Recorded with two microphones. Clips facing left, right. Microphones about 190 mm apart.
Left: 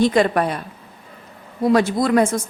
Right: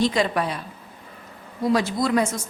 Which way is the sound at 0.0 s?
55° left (ahead or behind).